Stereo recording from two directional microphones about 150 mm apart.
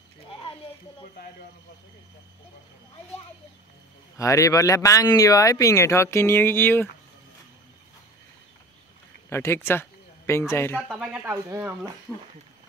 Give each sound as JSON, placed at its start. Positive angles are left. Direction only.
{"t": 4.2, "sound": "speech", "side_deg": 20}
{"t": 9.3, "sound": "speech", "side_deg": 15}
{"t": 11.0, "sound": "speech", "side_deg": -10}
{"t": 12.1, "sound": "speech", "side_deg": 5}